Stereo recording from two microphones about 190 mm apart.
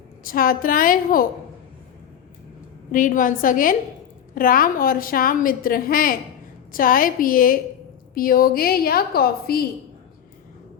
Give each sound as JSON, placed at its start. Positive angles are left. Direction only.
{"t": 0.3, "sound": "a woman's voice", "side_deg": 50}
{"t": 2.9, "sound": "a woman's voice", "side_deg": 45}